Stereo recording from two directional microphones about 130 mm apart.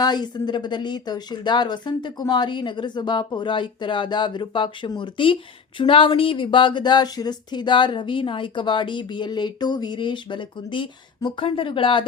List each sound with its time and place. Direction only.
0.0 s speech: 35° left (ahead or behind)